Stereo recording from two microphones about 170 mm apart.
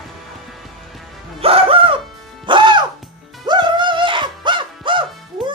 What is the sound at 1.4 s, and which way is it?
Music, 35° right (ahead or behind).